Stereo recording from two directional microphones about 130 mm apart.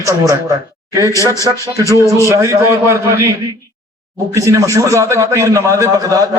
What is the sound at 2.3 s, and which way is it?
A man's voice, 20° right (ahead or behind).